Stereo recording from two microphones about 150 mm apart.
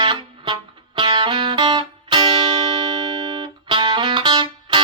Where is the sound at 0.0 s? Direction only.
35° right (ahead or behind).